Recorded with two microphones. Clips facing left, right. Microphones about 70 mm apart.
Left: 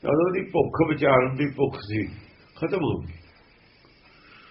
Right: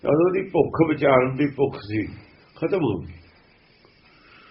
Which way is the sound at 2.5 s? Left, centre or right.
Centre.